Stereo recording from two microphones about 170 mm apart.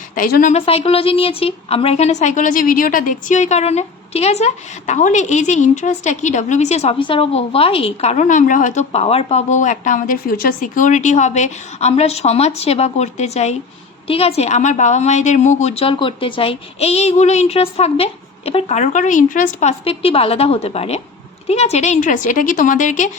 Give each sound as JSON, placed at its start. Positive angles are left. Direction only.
{"t": 0.2, "sound": "a woman's voice", "side_deg": 55}
{"t": 0.5, "sound": "a woman's voice", "side_deg": 35}